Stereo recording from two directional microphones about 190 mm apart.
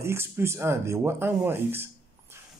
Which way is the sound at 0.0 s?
15° right (ahead or behind).